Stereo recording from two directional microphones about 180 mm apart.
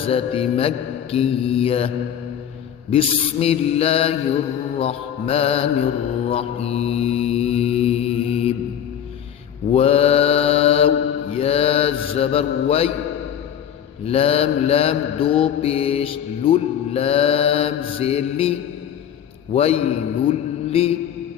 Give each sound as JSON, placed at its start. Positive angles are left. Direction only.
{"t": 0.0, "sound": "mantra", "side_deg": 30}
{"t": 2.9, "sound": "mantra", "side_deg": 35}
{"t": 9.7, "sound": "mantra", "side_deg": 35}
{"t": 14.0, "sound": "mantra", "side_deg": 35}
{"t": 19.5, "sound": "mantra", "side_deg": 35}